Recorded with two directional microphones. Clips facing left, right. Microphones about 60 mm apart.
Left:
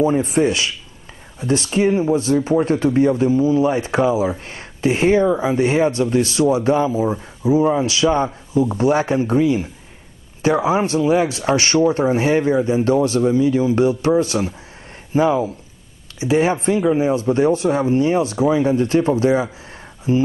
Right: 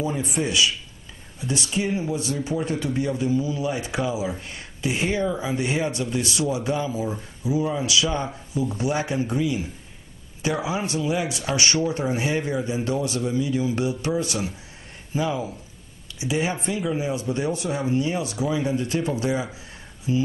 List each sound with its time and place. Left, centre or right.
0.0 s speech: left